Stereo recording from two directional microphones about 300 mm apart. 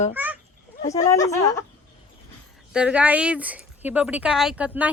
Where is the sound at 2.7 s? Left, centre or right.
Centre.